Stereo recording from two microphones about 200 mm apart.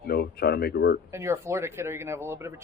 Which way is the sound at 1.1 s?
15° right (ahead or behind).